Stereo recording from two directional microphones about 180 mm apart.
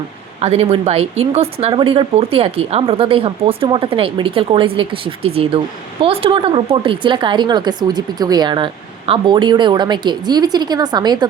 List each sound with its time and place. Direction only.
0.4 s a woman's voice: 35° right (ahead or behind)